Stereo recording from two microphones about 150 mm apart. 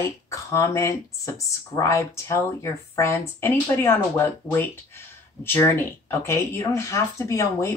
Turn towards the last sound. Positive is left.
turn(degrees=20)  # may be behind; listen again after turning